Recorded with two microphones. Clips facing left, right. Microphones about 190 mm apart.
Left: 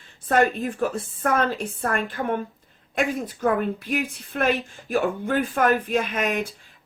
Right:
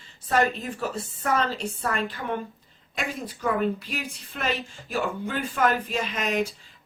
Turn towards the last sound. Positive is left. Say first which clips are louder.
# left 2 dB
turn(degrees=55)  # may be behind; listen again after turning